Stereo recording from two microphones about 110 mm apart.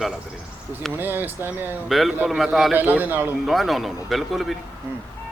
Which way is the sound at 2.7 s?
15° right (ahead or behind).